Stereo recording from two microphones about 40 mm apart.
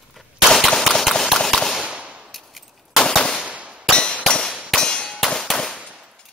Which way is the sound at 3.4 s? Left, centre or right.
Right.